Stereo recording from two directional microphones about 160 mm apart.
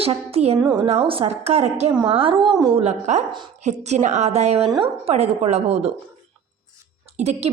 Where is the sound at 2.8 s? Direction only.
45° right (ahead or behind).